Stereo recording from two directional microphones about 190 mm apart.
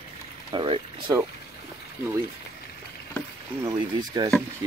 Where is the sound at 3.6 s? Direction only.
20° right (ahead or behind).